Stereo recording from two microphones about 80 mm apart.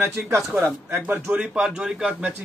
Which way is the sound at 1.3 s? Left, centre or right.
Centre.